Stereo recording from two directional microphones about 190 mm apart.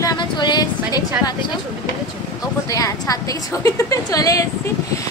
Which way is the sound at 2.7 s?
20° left (ahead or behind).